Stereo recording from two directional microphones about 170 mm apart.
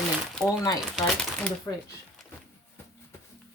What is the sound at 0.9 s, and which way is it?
Speech, centre (ahead or behind).